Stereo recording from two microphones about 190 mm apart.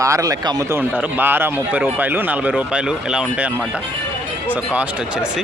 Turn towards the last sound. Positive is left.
turn(degrees=-5)  # may be behind; listen again after turning